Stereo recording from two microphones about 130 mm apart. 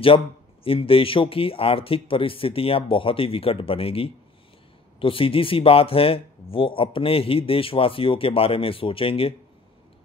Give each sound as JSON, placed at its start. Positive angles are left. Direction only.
{"t": 0.7, "sound": "speech", "side_deg": 45}